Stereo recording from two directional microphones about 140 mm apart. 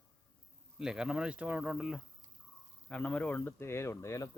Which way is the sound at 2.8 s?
5° left (ahead or behind).